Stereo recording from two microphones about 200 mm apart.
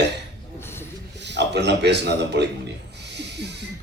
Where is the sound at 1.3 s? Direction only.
60° right (ahead or behind).